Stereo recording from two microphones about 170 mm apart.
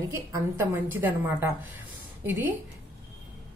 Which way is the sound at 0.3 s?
15° right (ahead or behind).